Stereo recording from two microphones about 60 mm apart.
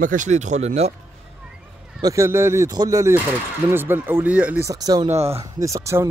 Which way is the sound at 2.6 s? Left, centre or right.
Right.